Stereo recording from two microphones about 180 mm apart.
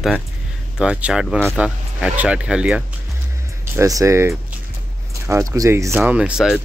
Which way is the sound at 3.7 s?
15° right (ahead or behind).